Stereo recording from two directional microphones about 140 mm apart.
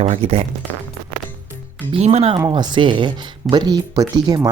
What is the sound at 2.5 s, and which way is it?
Speech, 35° right (ahead or behind).